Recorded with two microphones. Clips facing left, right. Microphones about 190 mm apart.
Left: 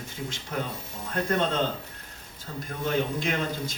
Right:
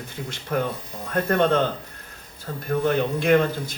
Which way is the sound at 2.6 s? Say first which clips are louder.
Right 6 dB; 60° right (ahead or behind).